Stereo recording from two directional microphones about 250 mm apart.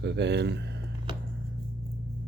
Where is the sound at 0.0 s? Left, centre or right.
Right.